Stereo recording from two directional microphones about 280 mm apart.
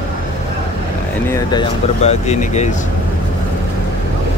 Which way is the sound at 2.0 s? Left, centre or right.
Left.